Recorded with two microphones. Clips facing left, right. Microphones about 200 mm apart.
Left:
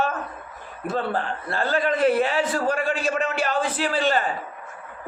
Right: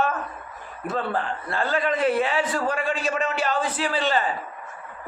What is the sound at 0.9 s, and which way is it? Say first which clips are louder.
A man's voice: left 1 dB; 35° left (ahead or behind).